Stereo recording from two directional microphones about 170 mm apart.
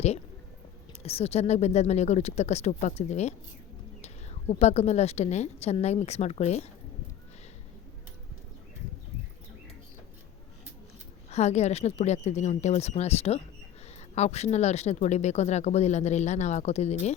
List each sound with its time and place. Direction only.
1.0 s speech: 35° left (ahead or behind)
11.3 s speech: 40° left (ahead or behind)